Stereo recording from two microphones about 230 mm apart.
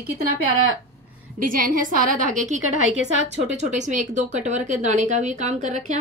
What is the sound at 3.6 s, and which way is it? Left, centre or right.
A woman's voice, right.